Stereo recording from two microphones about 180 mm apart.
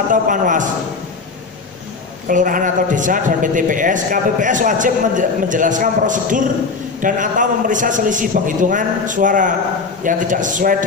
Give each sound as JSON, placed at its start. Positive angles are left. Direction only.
{"t": 0.1, "sound": "a man's voice", "side_deg": -45}
{"t": 2.2, "sound": "a man's voice", "side_deg": -50}